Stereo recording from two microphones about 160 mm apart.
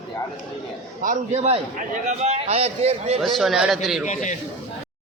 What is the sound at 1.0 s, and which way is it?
A man's voice, 50° right (ahead or behind).